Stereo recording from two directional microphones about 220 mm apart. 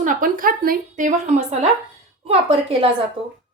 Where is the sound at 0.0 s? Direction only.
40° right (ahead or behind).